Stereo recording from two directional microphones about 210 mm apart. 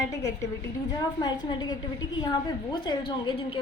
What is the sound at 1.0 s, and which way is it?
A woman's voice, 20° left (ahead or behind).